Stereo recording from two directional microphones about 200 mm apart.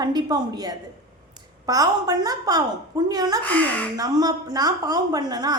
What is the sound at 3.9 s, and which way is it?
A woman's voice, 20° right (ahead or behind).